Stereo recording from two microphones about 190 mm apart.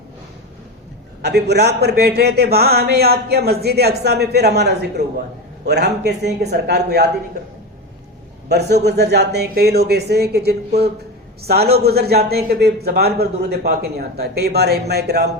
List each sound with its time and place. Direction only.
1.2 s a man's voice: 60° right (ahead or behind)
8.4 s a man's voice: 60° right (ahead or behind)